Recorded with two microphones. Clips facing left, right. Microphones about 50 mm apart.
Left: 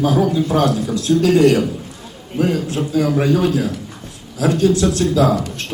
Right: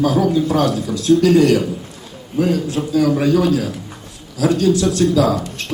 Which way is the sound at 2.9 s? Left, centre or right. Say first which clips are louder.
Right 2 dB; left.